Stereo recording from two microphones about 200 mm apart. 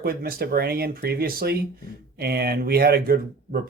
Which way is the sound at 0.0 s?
50° right (ahead or behind).